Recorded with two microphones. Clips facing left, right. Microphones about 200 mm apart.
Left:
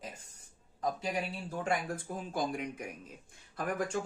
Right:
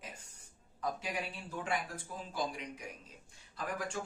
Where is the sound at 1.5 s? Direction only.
45° left (ahead or behind).